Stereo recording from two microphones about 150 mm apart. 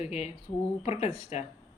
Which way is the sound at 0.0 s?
45° left (ahead or behind).